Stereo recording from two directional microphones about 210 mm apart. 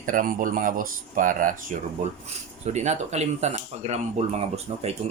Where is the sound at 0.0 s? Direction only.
40° right (ahead or behind).